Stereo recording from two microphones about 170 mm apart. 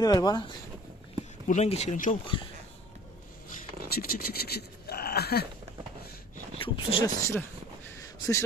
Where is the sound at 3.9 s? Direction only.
60° left (ahead or behind).